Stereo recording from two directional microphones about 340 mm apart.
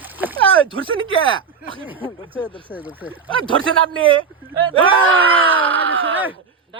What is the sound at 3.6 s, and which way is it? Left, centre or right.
Speech, right.